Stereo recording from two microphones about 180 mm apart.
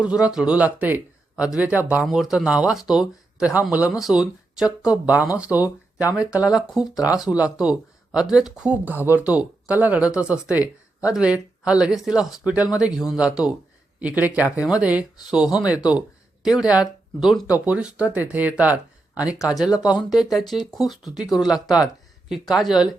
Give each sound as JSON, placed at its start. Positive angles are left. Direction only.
{"t": 0.1, "sound": "speech", "side_deg": -5}
{"t": 6.9, "sound": "speech", "side_deg": 20}
{"t": 7.2, "sound": "speech", "side_deg": -5}